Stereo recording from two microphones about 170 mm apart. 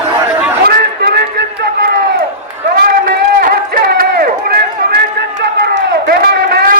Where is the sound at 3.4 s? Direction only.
60° right (ahead or behind).